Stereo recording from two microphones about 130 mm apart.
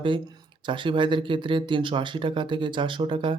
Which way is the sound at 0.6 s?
40° right (ahead or behind).